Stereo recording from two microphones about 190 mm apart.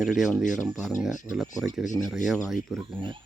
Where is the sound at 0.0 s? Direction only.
Centre (ahead or behind).